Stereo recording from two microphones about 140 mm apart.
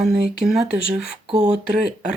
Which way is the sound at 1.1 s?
55° right (ahead or behind).